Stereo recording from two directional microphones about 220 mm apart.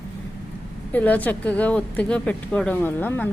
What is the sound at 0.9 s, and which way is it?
A woman's voice, 5° left (ahead or behind).